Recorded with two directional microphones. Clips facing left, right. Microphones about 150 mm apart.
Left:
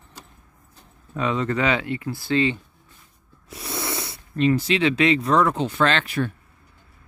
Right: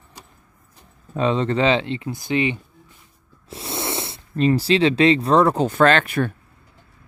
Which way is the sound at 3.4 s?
25° right (ahead or behind).